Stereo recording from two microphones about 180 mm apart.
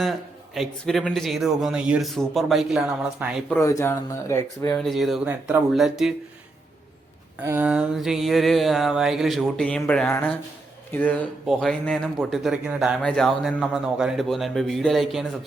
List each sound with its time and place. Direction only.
0.0 s speech: centre (ahead or behind)
3.6 s speech: 15° left (ahead or behind)
4.8 s speech: centre (ahead or behind)
7.3 s speech: 10° right (ahead or behind)